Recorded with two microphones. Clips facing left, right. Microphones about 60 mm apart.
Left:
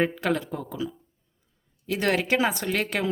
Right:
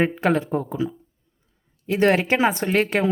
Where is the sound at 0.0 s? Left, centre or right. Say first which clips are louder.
Right 4 dB; right.